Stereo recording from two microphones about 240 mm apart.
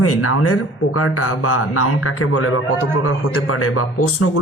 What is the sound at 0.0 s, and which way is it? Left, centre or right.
A man's voice, left.